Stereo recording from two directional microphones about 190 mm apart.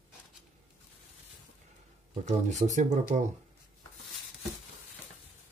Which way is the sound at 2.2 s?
40° right (ahead or behind).